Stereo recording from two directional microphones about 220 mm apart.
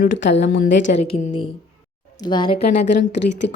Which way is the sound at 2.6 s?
50° left (ahead or behind).